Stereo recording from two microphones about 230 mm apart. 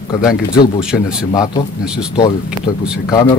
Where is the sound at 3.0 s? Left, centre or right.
Centre.